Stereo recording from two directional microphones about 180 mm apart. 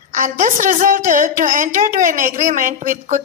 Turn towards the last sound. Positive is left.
turn(degrees=-50)  # may be behind; listen again after turning